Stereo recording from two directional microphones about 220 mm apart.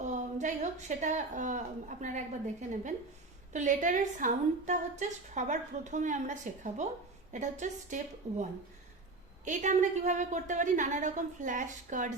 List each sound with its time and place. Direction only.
0.0 s a woman's voice: 35° right (ahead or behind)